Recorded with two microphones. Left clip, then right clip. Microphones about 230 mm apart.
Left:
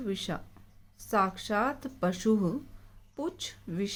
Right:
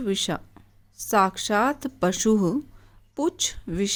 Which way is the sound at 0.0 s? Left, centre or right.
Right.